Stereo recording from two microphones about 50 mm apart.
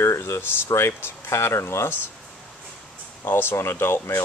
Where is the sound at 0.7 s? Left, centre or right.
Left.